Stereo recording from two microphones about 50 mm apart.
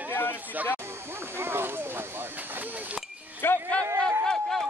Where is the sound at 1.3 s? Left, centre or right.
Right.